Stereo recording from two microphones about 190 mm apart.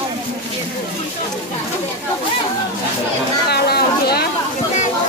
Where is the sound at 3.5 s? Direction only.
55° left (ahead or behind).